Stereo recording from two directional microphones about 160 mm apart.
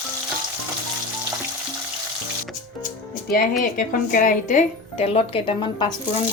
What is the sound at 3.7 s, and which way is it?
A woman's voice, 60° left (ahead or behind).